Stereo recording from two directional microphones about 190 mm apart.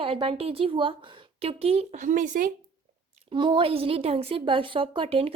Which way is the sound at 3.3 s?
25° right (ahead or behind).